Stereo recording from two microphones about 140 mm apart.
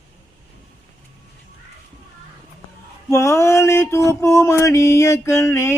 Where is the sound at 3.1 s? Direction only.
20° left (ahead or behind).